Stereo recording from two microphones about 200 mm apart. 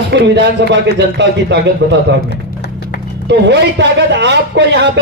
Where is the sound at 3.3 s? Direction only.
60° right (ahead or behind).